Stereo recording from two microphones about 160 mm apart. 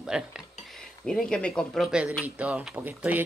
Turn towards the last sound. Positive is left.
turn(degrees=-10)  # may be behind; listen again after turning